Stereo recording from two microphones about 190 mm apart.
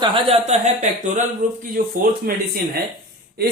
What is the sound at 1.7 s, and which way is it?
Speech, 45° right (ahead or behind).